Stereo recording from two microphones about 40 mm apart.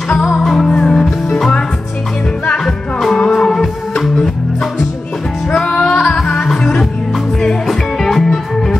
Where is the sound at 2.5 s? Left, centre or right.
Centre.